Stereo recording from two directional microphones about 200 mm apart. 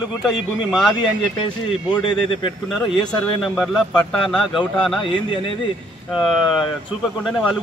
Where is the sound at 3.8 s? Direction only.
20° left (ahead or behind).